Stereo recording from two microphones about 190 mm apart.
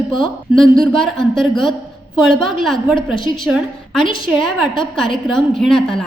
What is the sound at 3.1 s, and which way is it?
Speech, 25° left (ahead or behind).